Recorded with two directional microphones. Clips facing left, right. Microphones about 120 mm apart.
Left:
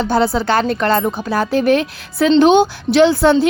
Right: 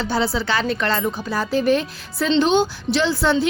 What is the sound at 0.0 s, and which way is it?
A woman's voice, 50° left (ahead or behind).